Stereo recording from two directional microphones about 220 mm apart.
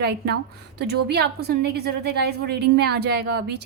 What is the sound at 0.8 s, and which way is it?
A woman's voice, 50° right (ahead or behind).